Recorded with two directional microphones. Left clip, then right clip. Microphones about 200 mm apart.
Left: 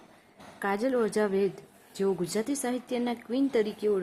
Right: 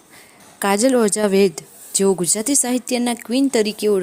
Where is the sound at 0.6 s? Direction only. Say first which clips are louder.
Right 11 dB; 40° right (ahead or behind).